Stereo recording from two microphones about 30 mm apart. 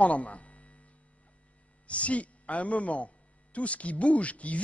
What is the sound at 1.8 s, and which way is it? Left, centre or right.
A man's voice, left.